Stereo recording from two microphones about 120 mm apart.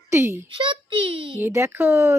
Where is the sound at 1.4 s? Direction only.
20° right (ahead or behind).